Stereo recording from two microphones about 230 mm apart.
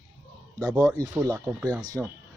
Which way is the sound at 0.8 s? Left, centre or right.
Centre.